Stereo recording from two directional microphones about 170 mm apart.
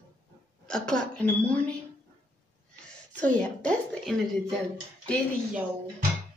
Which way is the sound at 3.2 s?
5° left (ahead or behind).